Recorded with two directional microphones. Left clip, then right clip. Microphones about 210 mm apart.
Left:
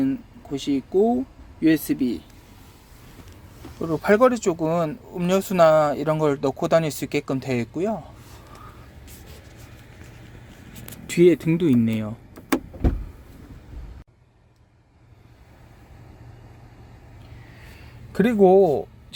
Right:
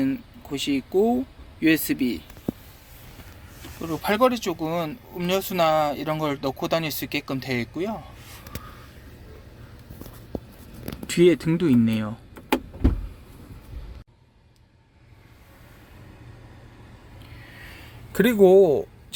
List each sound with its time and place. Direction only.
0.0 s speech: 10° left (ahead or behind)
3.8 s speech: 35° left (ahead or behind)
11.0 s speech: 5° left (ahead or behind)
18.1 s speech: 5° left (ahead or behind)